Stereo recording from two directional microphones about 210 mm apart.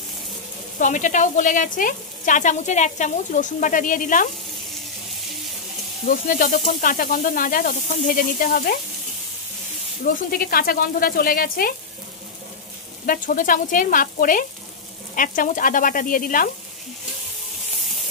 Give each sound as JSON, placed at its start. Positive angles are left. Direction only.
{"t": 0.7, "sound": "speech", "side_deg": 40}
{"t": 6.0, "sound": "speech", "side_deg": 40}
{"t": 10.0, "sound": "speech", "side_deg": 40}
{"t": 13.0, "sound": "speech", "side_deg": 40}